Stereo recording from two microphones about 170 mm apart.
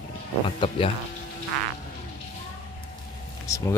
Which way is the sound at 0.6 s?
30° left (ahead or behind).